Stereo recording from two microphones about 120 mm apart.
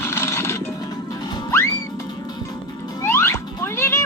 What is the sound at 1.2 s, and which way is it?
Music, 35° left (ahead or behind).